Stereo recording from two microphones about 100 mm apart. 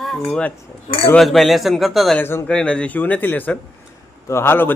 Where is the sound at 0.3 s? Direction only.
10° left (ahead or behind).